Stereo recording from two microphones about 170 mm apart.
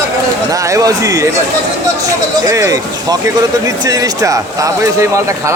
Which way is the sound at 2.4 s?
20° right (ahead or behind).